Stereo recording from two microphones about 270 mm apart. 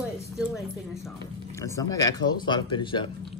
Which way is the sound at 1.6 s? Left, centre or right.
Centre.